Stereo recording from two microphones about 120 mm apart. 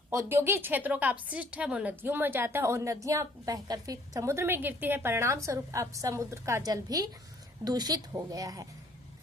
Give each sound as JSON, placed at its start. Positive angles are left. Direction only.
{"t": 0.1, "sound": "a woman's voice", "side_deg": -20}